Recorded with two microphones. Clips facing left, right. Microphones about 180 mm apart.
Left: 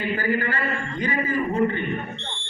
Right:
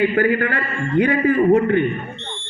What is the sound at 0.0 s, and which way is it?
A man's voice, 60° right (ahead or behind).